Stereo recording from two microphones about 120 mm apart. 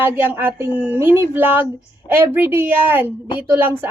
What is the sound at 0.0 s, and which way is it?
Speech, 15° right (ahead or behind).